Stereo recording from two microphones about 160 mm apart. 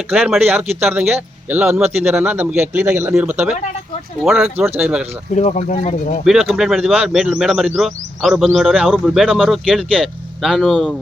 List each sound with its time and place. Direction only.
0.1 s speech: centre (ahead or behind)
0.3 s speech: 15° right (ahead or behind)
5.3 s speech: 45° left (ahead or behind)
6.2 s speech: centre (ahead or behind)